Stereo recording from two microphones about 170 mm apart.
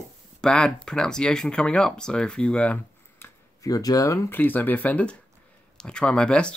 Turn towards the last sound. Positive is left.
turn(degrees=5)  # may be behind; listen again after turning